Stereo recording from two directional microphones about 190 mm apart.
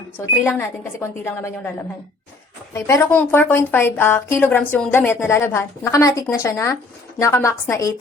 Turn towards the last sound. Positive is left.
turn(degrees=15)  # may be behind; listen again after turning